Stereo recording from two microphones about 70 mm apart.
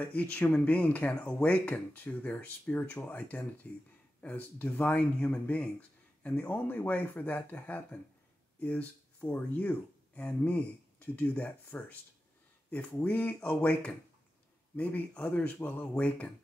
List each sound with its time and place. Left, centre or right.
0.0 s speech: left